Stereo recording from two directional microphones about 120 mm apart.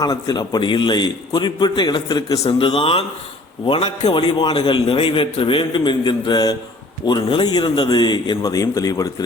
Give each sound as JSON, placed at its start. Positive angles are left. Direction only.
{"t": 0.0, "sound": "a man's voice", "side_deg": 35}